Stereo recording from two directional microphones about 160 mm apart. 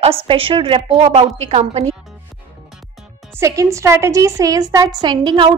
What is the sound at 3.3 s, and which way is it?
A woman's voice, 20° right (ahead or behind).